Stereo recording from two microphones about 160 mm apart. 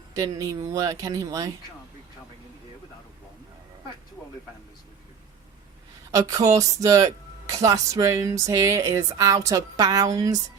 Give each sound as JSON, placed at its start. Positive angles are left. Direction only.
{"t": 0.1, "sound": "speech", "side_deg": -20}
{"t": 6.1, "sound": "speech", "side_deg": -20}